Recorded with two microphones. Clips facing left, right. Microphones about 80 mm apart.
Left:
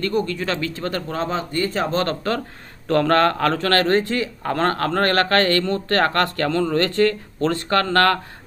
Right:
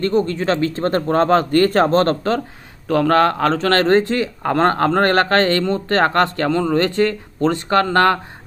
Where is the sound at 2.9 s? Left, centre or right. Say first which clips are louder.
Right 2 dB; centre.